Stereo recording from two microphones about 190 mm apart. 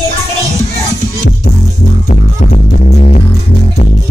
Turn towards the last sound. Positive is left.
turn(degrees=40)  # may be behind; listen again after turning